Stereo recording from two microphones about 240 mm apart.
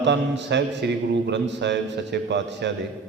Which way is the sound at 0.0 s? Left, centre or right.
Right.